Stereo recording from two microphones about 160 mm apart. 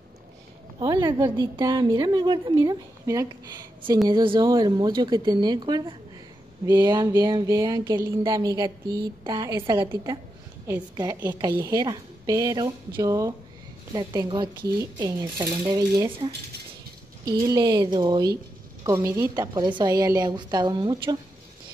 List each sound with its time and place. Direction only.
0.7 s a woman's voice: 25° right (ahead or behind)
11.2 s a woman's voice: 25° right (ahead or behind)